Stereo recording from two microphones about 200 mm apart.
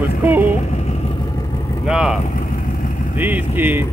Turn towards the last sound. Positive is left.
turn(degrees=-10)  # may be behind; listen again after turning